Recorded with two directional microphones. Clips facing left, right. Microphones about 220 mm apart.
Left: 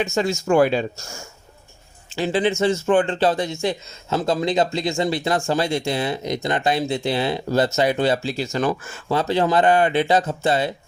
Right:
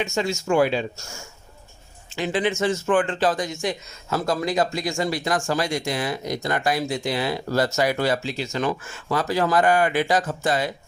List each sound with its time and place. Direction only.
0.0 s speech: 35° left (ahead or behind)
2.1 s speech: 30° left (ahead or behind)